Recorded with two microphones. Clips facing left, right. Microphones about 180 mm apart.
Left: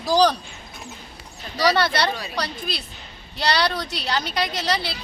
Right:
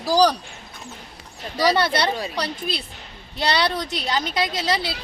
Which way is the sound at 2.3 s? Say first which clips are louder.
Right 2 dB; 25° right (ahead or behind).